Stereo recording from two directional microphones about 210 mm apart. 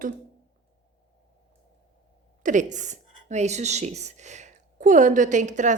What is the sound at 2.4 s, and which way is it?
A woman's voice, 35° right (ahead or behind).